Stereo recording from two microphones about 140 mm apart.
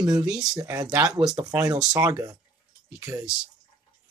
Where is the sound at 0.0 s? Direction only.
30° right (ahead or behind).